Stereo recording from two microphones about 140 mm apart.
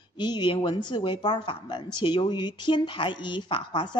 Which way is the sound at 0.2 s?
30° left (ahead or behind).